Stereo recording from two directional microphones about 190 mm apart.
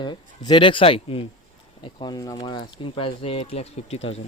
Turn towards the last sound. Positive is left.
turn(degrees=35)  # may be behind; listen again after turning